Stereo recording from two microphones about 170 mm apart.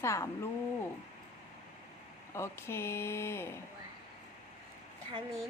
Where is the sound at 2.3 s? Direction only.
15° left (ahead or behind).